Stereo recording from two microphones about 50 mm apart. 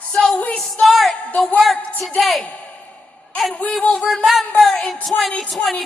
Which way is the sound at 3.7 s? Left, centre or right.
Centre.